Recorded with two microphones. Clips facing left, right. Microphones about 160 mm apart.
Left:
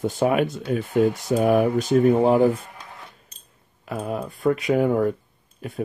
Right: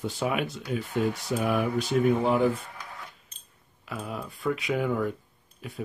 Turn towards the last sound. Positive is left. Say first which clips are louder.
# left 7 dB
turn(degrees=50)  # may be behind; listen again after turning